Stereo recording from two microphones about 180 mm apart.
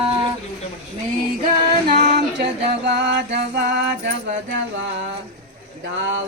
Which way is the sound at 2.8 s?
70° right (ahead or behind).